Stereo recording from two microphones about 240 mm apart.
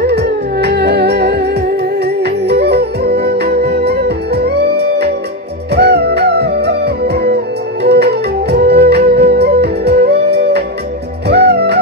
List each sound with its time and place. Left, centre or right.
0.0 s music: right